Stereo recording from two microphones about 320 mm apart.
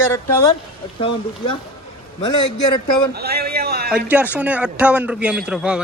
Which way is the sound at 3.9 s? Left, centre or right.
Centre.